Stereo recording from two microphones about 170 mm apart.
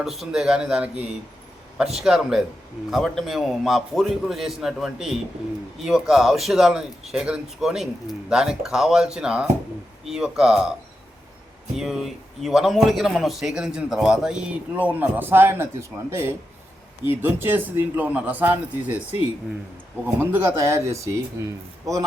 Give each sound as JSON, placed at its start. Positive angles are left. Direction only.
{"t": 0.0, "sound": "a man's voice", "side_deg": 0}
{"t": 11.8, "sound": "a man's voice", "side_deg": 0}
{"t": 20.1, "sound": "speech", "side_deg": -15}